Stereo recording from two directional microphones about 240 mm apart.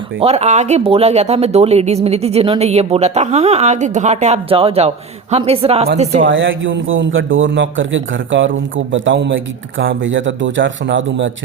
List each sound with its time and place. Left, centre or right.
0.2 s speech: right
6.2 s a man's voice: right